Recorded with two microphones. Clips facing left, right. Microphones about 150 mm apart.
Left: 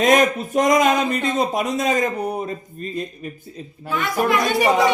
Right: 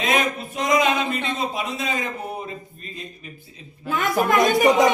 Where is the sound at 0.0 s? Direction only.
45° left (ahead or behind).